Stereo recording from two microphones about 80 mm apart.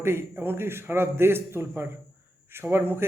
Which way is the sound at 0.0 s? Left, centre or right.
Right.